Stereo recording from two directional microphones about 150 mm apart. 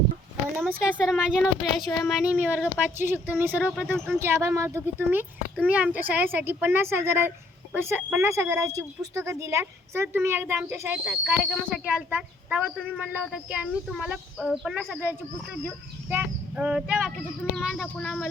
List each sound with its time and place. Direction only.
0.5 s speech: 5° right (ahead or behind)
3.9 s speech: 5° left (ahead or behind)
4.2 s speech: 15° right (ahead or behind); by 18.3 s centre (ahead or behind)